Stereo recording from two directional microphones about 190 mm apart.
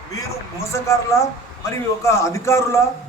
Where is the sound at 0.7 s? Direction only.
15° left (ahead or behind).